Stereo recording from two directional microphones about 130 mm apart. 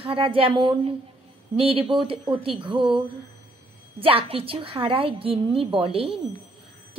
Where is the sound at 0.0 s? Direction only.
45° right (ahead or behind).